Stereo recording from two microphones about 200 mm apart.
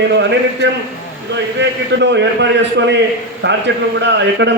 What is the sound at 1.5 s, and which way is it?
A man's voice, 60° right (ahead or behind).